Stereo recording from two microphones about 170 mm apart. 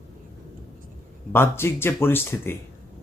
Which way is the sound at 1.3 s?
15° left (ahead or behind).